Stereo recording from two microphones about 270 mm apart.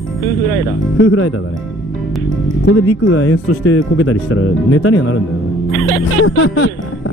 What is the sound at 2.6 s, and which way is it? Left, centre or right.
Speech, left.